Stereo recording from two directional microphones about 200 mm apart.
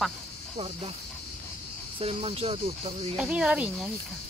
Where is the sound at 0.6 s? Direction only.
30° right (ahead or behind).